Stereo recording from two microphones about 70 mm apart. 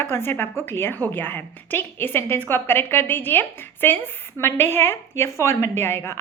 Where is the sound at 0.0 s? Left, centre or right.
Left.